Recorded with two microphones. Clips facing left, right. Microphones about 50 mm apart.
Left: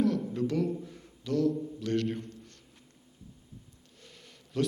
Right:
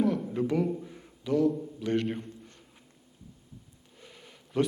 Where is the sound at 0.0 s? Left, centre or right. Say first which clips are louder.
Right 1 dB; centre.